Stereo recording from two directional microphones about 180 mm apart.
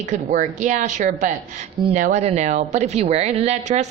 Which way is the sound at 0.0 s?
45° right (ahead or behind).